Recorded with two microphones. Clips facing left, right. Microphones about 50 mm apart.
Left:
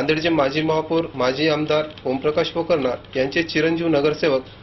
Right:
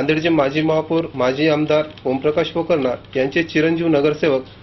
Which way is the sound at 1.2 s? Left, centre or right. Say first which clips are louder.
Right 4 dB; right.